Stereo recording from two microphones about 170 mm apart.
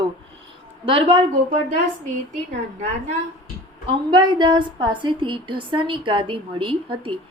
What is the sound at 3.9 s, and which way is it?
A woman's voice, 25° right (ahead or behind).